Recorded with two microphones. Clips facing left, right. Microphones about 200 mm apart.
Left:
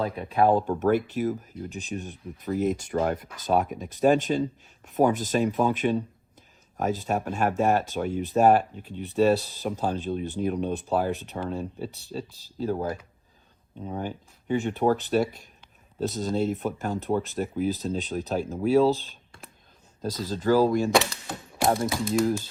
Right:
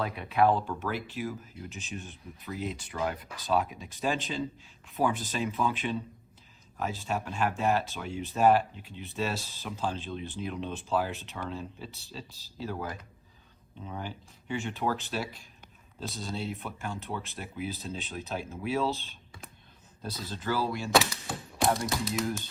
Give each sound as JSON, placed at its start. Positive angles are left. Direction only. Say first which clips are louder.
{"t": 0.0, "sound": "speech", "louder": "left 3 dB", "side_deg": 35}
{"t": 0.4, "sound": "speech", "louder": "left 6 dB", "side_deg": 45}
{"t": 12.7, "sound": "speech", "louder": "left 7 dB", "side_deg": 30}
{"t": 13.8, "sound": "speech", "louder": "left 7 dB", "side_deg": 40}
{"t": 20.0, "sound": "speech", "louder": "left 8 dB", "side_deg": 35}
{"t": 20.9, "sound": "typewriter", "louder": "left 2 dB", "side_deg": 0}